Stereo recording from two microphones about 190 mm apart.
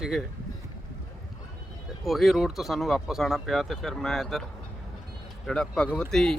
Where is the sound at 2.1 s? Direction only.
Centre (ahead or behind).